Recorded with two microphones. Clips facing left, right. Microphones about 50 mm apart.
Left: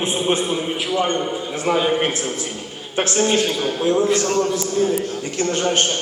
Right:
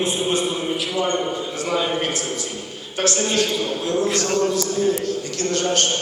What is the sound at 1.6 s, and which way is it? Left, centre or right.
A man's voice, left.